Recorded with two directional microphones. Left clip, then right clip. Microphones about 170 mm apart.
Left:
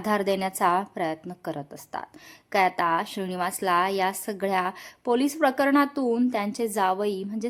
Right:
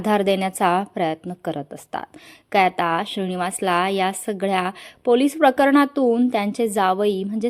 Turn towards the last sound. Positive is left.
turn(degrees=-25)  # may be behind; listen again after turning